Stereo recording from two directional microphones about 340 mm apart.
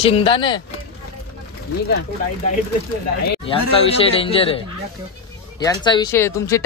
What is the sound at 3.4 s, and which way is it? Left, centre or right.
Speech, centre.